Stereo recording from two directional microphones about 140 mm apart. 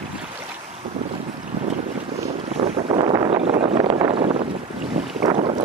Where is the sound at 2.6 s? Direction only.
45° right (ahead or behind).